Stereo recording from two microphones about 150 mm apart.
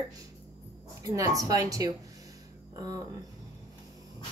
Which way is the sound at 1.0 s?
20° right (ahead or behind).